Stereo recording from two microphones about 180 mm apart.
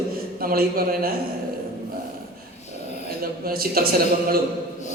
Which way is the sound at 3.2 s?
55° right (ahead or behind).